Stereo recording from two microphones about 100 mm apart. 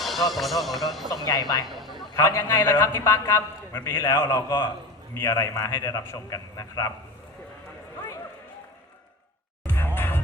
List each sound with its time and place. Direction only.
0.0 s speech: centre (ahead or behind)
1.3 s a man's voice: 35° left (ahead or behind)
1.6 s speech: centre (ahead or behind)
2.1 s a man's voice: 25° left (ahead or behind)
9.6 s music: 20° left (ahead or behind)